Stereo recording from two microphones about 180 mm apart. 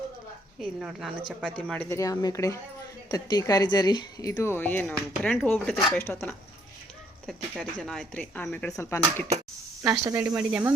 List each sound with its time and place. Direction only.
0.6 s speech: 5° right (ahead or behind)
1.7 s a woman's voice: 10° left (ahead or behind)
7.3 s a woman's voice: centre (ahead or behind)
9.9 s speech: 15° right (ahead or behind)